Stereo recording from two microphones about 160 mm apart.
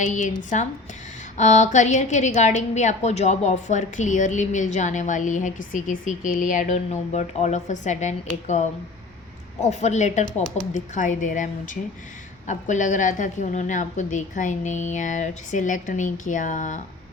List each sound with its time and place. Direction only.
0.0 s a woman's voice: 50° left (ahead or behind)
9.6 s a woman's voice: 45° left (ahead or behind)